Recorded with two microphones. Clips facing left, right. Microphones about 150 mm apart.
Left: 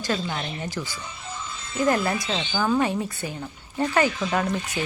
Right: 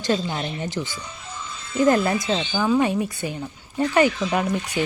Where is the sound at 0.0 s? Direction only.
20° right (ahead or behind).